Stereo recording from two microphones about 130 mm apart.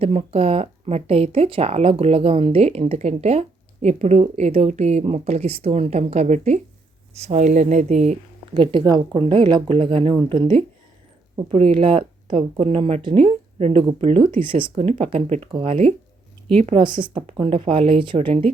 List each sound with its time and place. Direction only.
0.0 s speech: 50° right (ahead or behind)
8.5 s speech: 40° right (ahead or behind)
16.8 s speech: 40° right (ahead or behind)